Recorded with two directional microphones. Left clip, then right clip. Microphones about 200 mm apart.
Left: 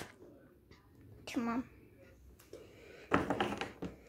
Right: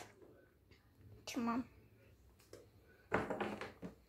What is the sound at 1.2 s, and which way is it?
Speech, centre (ahead or behind).